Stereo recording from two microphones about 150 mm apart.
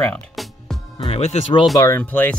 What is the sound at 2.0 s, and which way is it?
Speech, 10° left (ahead or behind).